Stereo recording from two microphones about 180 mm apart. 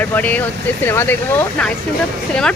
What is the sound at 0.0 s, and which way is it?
Speech, 10° left (ahead or behind).